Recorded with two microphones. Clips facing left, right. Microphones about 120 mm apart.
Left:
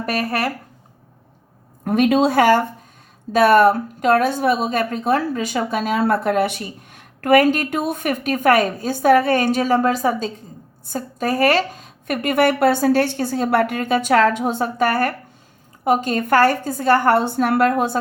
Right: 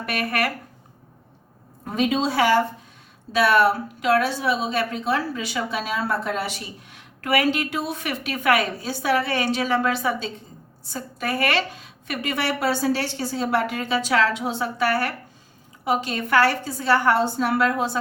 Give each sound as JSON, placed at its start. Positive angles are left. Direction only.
{"t": 0.0, "sound": "speech", "side_deg": 35}
{"t": 1.8, "sound": "a woman's voice", "side_deg": 60}